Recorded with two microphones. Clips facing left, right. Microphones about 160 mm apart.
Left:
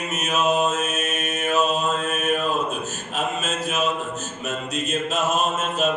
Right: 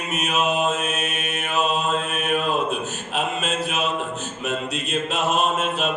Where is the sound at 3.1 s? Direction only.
45° left (ahead or behind).